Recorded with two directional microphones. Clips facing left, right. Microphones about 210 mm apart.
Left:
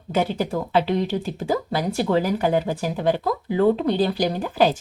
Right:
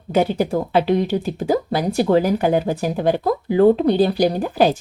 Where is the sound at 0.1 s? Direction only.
40° right (ahead or behind).